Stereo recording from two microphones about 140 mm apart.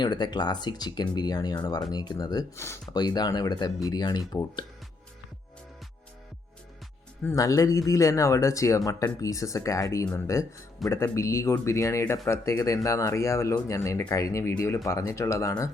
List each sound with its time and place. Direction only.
0.0 s speech: 30° left (ahead or behind)
7.3 s speech: 25° left (ahead or behind)